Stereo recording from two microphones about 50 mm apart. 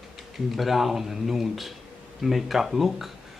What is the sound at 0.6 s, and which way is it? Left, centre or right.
Speech, centre.